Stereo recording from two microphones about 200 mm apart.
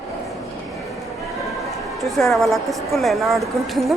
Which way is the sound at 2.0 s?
Centre (ahead or behind).